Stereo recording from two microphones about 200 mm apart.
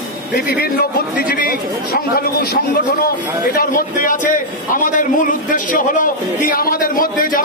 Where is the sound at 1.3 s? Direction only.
45° left (ahead or behind).